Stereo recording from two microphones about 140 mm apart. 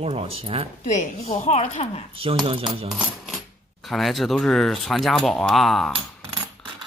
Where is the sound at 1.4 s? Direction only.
55° left (ahead or behind).